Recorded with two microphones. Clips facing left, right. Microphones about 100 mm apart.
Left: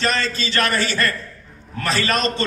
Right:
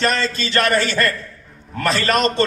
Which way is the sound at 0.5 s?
50° right (ahead or behind).